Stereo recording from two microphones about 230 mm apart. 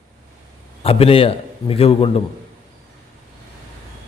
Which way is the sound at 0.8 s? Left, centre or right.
Left.